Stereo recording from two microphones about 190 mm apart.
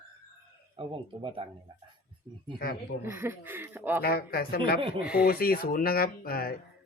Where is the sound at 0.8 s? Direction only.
25° right (ahead or behind).